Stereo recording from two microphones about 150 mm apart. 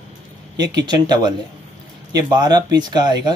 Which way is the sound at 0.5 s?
25° right (ahead or behind).